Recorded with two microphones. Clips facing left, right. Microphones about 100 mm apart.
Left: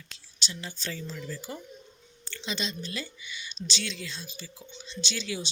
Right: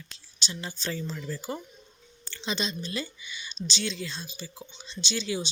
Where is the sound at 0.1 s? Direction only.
25° right (ahead or behind).